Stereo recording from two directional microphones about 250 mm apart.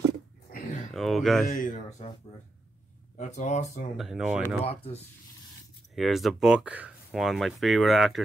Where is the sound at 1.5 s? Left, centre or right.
Left.